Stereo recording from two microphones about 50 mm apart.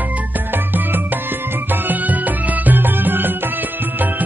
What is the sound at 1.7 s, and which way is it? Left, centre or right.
Music, right.